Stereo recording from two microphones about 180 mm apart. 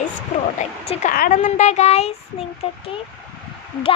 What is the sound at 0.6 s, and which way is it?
Speech, 40° left (ahead or behind).